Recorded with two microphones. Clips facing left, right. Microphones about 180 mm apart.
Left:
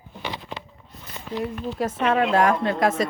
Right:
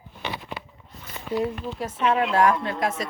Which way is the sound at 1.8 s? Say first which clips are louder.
Left 2 dB; 55° left (ahead or behind).